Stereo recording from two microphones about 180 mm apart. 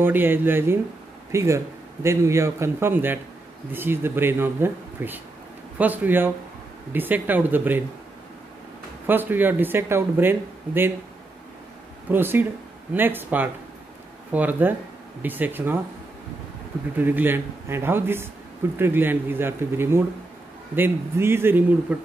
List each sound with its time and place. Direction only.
0.0 s speech: 10° right (ahead or behind)
9.0 s speech: 10° right (ahead or behind)
12.1 s speech: 10° right (ahead or behind)
16.9 s speech: 10° right (ahead or behind)